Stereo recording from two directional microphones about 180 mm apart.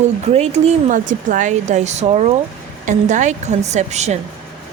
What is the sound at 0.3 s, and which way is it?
Speech, 35° right (ahead or behind).